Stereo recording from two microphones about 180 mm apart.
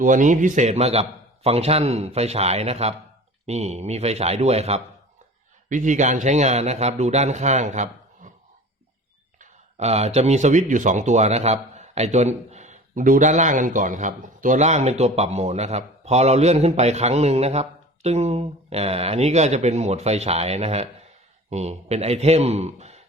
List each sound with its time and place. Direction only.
0.0 s speech: 45° right (ahead or behind)
9.4 s speech: 35° right (ahead or behind)